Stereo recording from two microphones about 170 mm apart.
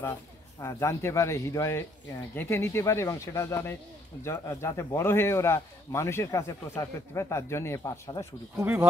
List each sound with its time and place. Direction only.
0.6 s speech: 15° left (ahead or behind)
8.5 s speech: 10° right (ahead or behind)